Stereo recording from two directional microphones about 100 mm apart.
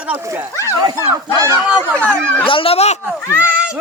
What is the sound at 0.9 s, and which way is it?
Speech, 30° right (ahead or behind).